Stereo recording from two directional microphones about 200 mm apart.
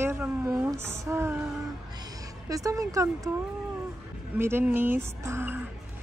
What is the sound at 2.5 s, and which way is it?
Speech, 15° right (ahead or behind).